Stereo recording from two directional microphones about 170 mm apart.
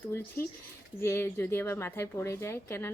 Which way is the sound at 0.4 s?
15° left (ahead or behind).